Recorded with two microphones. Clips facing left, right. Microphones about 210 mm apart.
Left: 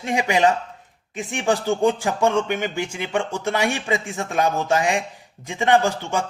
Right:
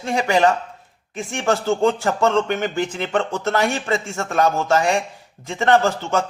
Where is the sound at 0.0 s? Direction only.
15° left (ahead or behind).